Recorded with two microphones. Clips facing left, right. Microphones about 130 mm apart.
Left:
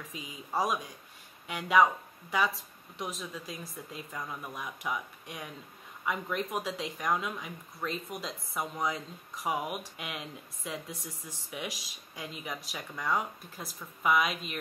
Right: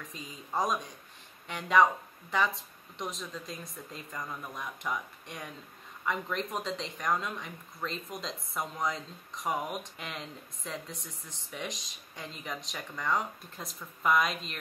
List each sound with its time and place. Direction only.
0.1 s speech: 5° left (ahead or behind)